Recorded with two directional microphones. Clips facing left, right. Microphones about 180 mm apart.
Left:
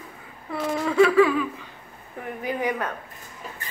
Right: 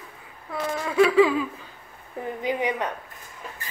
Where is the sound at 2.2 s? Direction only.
20° right (ahead or behind).